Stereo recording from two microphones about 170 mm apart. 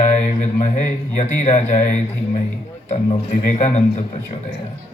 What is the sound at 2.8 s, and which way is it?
Speech, 45° left (ahead or behind).